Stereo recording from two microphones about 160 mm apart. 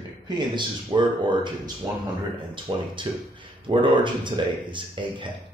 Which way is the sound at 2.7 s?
35° right (ahead or behind).